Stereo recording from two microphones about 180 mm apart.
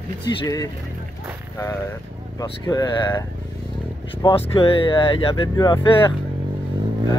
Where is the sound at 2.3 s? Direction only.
20° left (ahead or behind).